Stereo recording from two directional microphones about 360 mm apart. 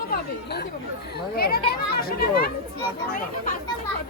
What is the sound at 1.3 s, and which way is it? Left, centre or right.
Speech, left.